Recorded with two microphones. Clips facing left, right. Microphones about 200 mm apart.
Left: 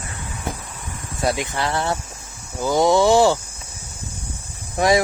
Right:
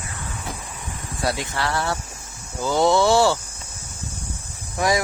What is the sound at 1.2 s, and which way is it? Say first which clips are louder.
Speech: left 3 dB; 20° left (ahead or behind).